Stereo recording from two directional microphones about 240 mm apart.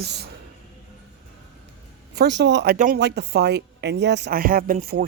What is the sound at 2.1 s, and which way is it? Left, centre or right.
Speech, right.